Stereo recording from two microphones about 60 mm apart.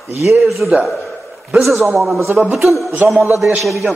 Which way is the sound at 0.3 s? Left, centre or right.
Centre.